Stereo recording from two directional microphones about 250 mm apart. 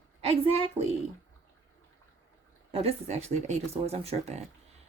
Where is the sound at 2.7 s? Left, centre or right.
Right.